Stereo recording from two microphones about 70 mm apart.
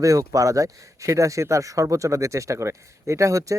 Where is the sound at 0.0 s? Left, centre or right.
Right.